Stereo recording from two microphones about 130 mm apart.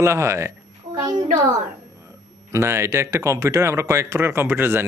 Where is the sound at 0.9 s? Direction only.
30° right (ahead or behind).